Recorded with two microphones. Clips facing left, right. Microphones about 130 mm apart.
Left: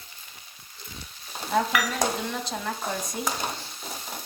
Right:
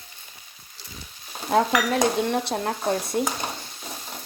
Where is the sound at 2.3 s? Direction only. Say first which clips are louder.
Right 6 dB; 55° right (ahead or behind).